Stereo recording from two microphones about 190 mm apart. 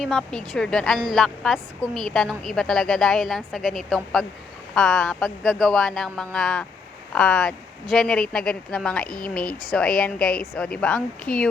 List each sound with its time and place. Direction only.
0.0 s speech: centre (ahead or behind)